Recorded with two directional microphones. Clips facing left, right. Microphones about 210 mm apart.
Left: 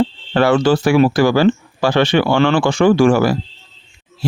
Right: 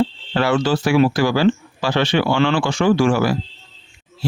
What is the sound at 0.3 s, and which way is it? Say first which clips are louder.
Speech: left 5 dB; 50° left (ahead or behind).